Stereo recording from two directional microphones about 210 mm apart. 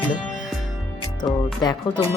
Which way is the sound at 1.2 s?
20° left (ahead or behind).